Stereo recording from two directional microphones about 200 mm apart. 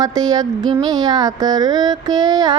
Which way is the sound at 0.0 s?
20° right (ahead or behind).